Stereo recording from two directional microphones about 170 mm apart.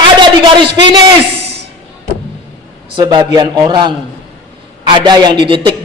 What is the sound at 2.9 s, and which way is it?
A man's voice, 25° right (ahead or behind).